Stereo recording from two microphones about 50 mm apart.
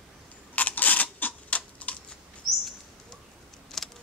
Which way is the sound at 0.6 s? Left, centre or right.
Left.